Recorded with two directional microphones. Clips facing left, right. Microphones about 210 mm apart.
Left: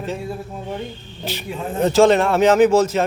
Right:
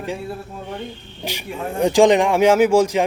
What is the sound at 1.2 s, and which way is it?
Speech, 15° right (ahead or behind).